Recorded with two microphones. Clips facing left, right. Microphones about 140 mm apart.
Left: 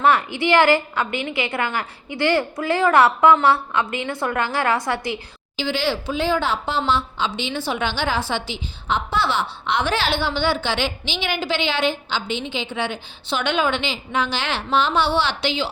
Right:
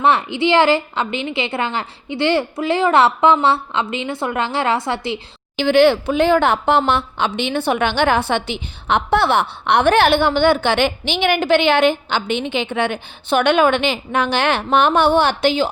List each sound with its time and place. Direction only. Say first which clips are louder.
0.0 s a woman's voice: right 2 dB; 25° right (ahead or behind)
5.5 s a woman's voice: right 10 dB; 60° right (ahead or behind)